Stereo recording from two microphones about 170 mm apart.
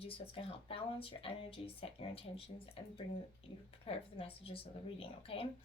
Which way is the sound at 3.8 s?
35° left (ahead or behind).